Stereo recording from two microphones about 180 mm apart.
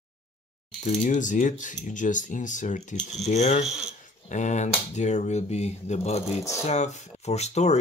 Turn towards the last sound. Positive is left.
turn(degrees=35)  # may be behind; listen again after turning